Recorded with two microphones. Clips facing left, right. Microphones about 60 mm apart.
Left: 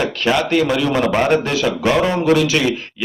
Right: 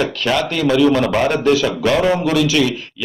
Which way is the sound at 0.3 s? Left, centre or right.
Centre.